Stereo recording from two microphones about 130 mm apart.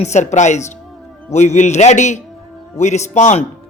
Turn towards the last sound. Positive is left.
turn(degrees=60)  # may be behind; listen again after turning